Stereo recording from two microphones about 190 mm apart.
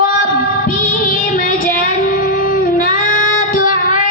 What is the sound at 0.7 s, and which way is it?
Music, 45° left (ahead or behind).